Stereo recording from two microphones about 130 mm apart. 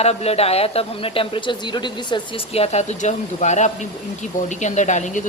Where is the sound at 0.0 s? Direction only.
55° left (ahead or behind); by 2.2 s 35° left (ahead or behind).